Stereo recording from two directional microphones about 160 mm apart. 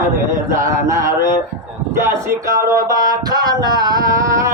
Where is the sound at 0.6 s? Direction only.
20° right (ahead or behind).